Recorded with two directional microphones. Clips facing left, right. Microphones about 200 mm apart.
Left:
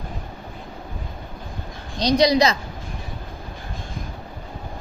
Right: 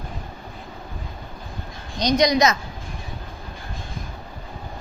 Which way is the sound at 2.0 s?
30° left (ahead or behind).